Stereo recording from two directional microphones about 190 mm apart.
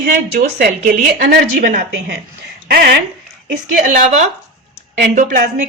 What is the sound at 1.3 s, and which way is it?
Speech, 50° right (ahead or behind).